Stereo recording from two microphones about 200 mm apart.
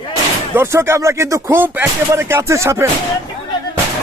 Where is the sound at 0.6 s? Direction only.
15° right (ahead or behind).